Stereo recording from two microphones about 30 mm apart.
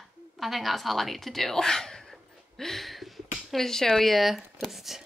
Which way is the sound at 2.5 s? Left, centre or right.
Centre.